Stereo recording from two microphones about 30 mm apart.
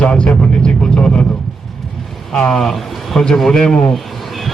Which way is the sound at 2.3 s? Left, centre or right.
Left.